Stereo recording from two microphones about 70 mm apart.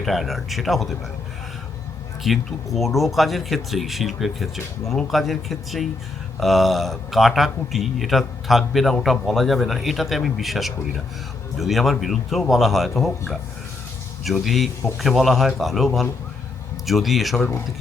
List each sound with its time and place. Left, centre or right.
0.0 s a man's voice: centre
2.3 s a man's voice: centre